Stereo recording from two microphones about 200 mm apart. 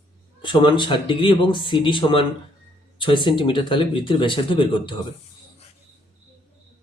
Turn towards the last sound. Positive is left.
turn(degrees=25)  # may be behind; listen again after turning